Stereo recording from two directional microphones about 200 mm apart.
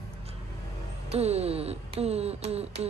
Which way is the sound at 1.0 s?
30° right (ahead or behind).